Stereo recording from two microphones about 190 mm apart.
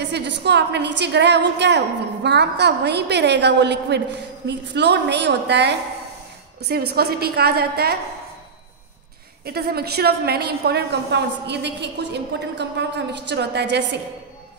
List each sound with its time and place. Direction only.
0.0 s a woman's voice: 65° right (ahead or behind)
9.4 s a woman's voice: 55° right (ahead or behind)